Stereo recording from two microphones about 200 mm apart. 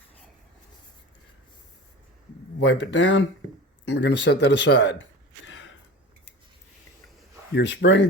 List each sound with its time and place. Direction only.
2.6 s speech: 65° left (ahead or behind)
5.5 s gasp: 70° left (ahead or behind)
7.5 s speech: 60° left (ahead or behind)